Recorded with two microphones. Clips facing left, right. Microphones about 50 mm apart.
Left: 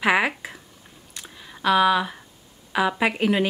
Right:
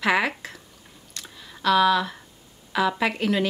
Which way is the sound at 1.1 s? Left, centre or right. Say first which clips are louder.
Left 1 dB; centre.